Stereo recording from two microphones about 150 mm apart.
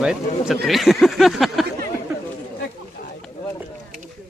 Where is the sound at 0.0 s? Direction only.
5° right (ahead or behind).